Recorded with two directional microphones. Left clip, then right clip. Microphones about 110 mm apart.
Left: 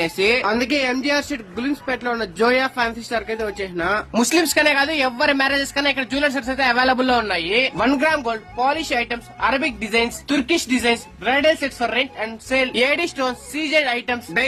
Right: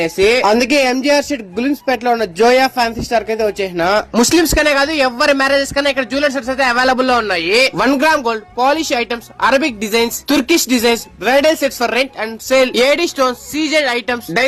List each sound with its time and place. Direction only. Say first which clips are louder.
0.0 s speech: right 6 dB; 35° right (ahead or behind)
3.8 s speech: right 6 dB; 55° right (ahead or behind)